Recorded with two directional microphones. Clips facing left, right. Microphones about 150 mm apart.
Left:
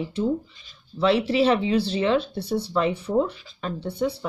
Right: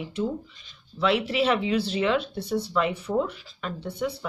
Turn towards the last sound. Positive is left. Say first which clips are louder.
# left 4 dB
turn(degrees=30)  # may be behind; listen again after turning